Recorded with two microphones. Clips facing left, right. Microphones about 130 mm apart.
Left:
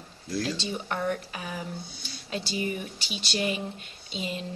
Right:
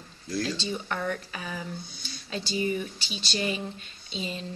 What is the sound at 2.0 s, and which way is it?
Speech, 10° left (ahead or behind).